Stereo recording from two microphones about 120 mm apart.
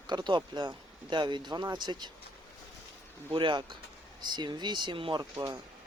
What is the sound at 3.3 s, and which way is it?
Speech, 40° right (ahead or behind).